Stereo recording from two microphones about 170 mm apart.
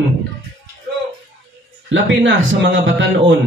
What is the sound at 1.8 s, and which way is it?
Speech, 90° right.